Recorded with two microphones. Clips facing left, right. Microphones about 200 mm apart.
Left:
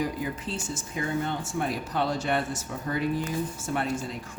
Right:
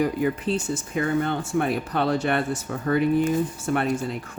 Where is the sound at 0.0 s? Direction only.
60° right (ahead or behind).